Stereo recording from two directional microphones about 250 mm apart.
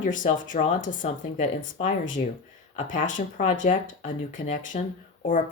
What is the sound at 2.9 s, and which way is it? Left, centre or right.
Speech, left.